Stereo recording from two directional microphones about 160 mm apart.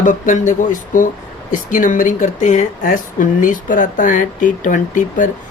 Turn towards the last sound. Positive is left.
turn(degrees=55)  # may be behind; listen again after turning